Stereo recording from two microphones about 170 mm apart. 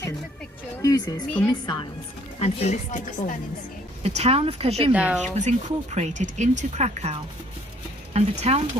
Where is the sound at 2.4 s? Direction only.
40° left (ahead or behind).